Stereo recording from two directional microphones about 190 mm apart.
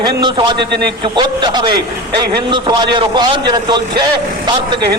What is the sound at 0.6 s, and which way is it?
Speech, 60° right (ahead or behind).